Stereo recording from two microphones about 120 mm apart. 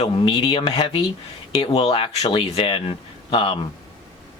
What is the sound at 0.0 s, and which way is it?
Speech, 50° left (ahead or behind).